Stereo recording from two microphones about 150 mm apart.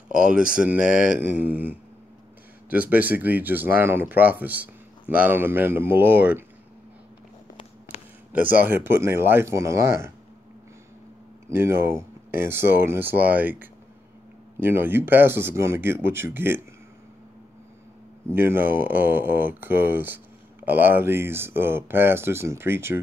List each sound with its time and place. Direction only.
0.1 s speech: 5° right (ahead or behind)
7.9 s a sound: 50° left (ahead or behind)
8.3 s speech: 10° right (ahead or behind)
11.4 s speech: 15° right (ahead or behind)
18.3 s speech: 15° right (ahead or behind)